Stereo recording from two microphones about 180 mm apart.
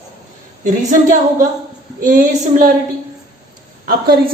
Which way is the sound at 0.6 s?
45° right (ahead or behind).